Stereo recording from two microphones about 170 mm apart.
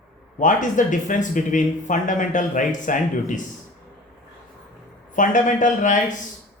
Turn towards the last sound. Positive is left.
turn(degrees=50)  # may be behind; listen again after turning